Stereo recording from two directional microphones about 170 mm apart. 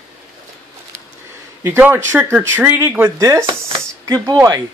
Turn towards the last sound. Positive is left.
turn(degrees=-20)  # may be behind; listen again after turning